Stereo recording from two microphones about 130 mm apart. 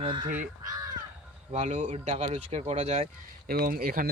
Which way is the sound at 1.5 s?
60° right (ahead or behind).